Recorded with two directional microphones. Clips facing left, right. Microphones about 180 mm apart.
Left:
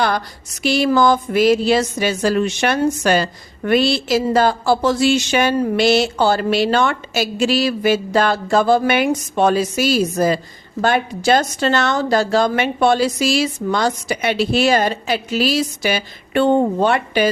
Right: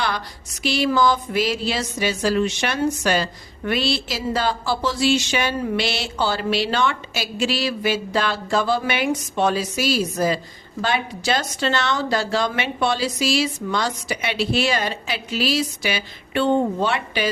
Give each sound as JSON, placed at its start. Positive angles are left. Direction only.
{"t": 0.6, "sound": "speech", "side_deg": 45}